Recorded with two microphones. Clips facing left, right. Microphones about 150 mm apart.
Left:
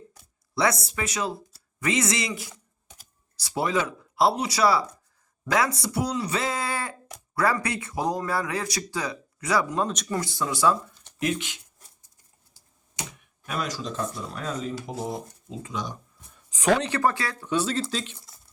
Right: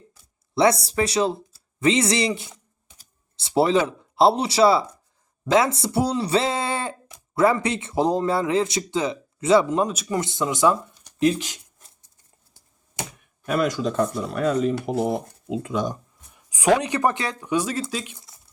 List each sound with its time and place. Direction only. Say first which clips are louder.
0.5 s speech: right 6 dB; 25° right (ahead or behind)
9.9 s speech: right 3 dB; 5° right (ahead or behind)
10.2 s speech: right 5 dB; 20° right (ahead or behind)
11.2 s speech: right 7 dB; 35° right (ahead or behind)
13.4 s speech: right 9 dB; 55° right (ahead or behind)
16.3 s speech: right 3 dB; 10° right (ahead or behind)